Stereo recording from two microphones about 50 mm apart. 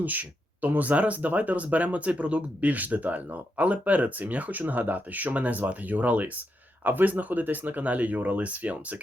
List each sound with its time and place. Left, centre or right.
0.0 s speech: right